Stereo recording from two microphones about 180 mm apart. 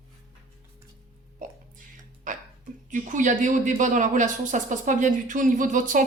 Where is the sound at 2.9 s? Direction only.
45° right (ahead or behind).